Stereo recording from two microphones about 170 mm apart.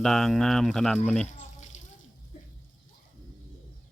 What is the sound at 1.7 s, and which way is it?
Water, 45° left (ahead or behind).